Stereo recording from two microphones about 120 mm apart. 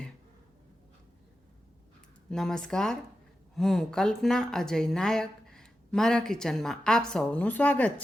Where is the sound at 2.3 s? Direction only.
5° left (ahead or behind).